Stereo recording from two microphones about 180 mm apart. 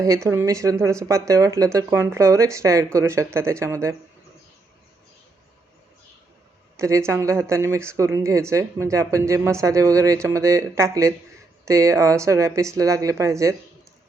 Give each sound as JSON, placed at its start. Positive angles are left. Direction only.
{"t": 0.0, "sound": "speech", "side_deg": -15}
{"t": 6.7, "sound": "speech", "side_deg": -15}